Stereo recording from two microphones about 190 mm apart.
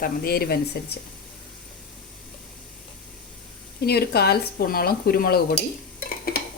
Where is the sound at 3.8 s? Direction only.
55° left (ahead or behind).